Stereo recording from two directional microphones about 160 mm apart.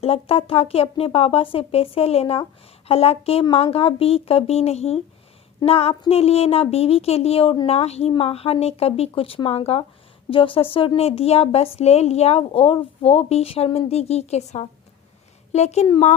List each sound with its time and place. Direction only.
0.0 s a woman's voice: 35° left (ahead or behind)